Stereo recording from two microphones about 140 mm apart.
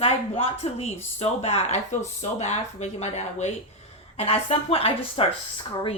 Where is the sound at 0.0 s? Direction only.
45° left (ahead or behind).